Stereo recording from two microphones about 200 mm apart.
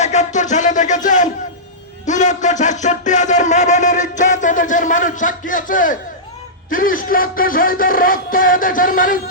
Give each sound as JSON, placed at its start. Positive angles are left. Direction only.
{"t": 0.0, "sound": "music", "side_deg": 35}
{"t": 2.0, "sound": "a sound", "side_deg": 35}
{"t": 6.7, "sound": "music", "side_deg": 45}